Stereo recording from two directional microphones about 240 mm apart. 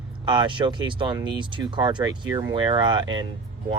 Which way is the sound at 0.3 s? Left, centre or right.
Centre.